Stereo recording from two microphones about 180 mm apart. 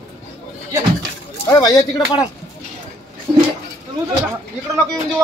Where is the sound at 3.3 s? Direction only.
25° right (ahead or behind).